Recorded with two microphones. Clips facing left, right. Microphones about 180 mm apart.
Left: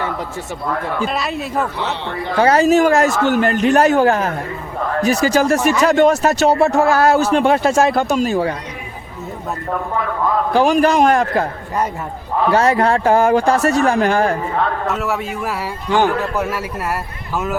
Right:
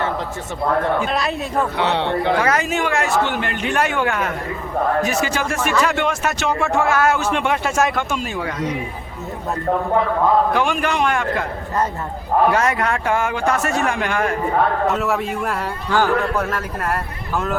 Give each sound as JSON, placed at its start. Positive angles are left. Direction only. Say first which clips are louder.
{"t": 1.0, "sound": "speech", "louder": "left 1 dB", "side_deg": 0}
{"t": 1.7, "sound": "a man's voice", "louder": "right 4 dB", "side_deg": -65}
{"t": 2.4, "sound": "speech", "louder": "left 8 dB", "side_deg": 30}
{"t": 10.5, "sound": "speech", "louder": "left 6 dB", "side_deg": 35}
{"t": 12.5, "sound": "speech", "louder": "left 5 dB", "side_deg": 30}
{"t": 14.8, "sound": "speech", "louder": "right 1 dB", "side_deg": 0}
{"t": 15.9, "sound": "a man's voice", "louder": "left 2 dB", "side_deg": 20}